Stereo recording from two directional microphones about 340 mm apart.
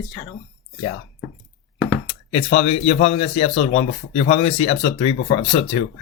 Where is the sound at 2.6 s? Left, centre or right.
Centre.